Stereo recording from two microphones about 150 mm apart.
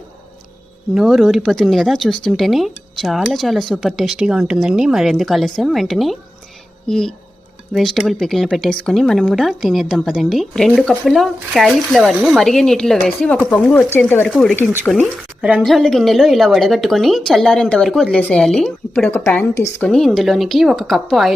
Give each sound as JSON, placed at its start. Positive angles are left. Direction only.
{"t": 0.9, "sound": "speech", "side_deg": 0}
{"t": 13.7, "sound": "speech", "side_deg": 15}
{"t": 15.0, "sound": "speech", "side_deg": -10}
{"t": 15.6, "sound": "speech", "side_deg": 5}
{"t": 19.9, "sound": "speech", "side_deg": 0}